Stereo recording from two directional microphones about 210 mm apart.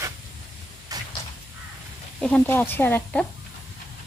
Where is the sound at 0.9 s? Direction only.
15° right (ahead or behind).